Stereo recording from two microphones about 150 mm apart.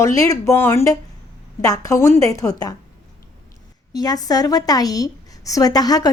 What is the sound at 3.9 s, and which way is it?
A woman's voice, 25° left (ahead or behind).